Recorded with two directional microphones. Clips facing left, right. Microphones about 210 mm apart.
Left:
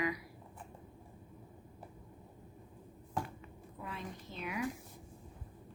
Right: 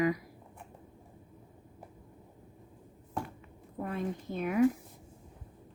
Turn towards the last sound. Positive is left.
turn(degrees=-50)  # may be behind; listen again after turning